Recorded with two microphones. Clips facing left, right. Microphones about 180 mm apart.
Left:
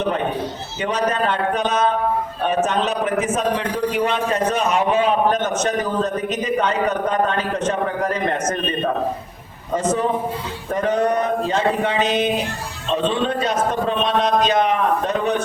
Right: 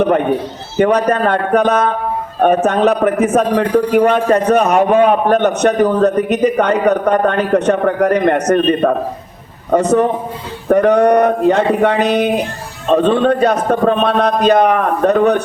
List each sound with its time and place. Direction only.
0.8 s a man's voice: 60° right (ahead or behind)